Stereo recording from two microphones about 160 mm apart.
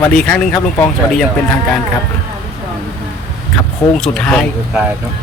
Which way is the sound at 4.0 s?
5° left (ahead or behind).